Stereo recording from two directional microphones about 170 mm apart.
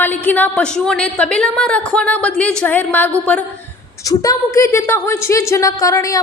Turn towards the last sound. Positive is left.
turn(degrees=20)  # may be behind; listen again after turning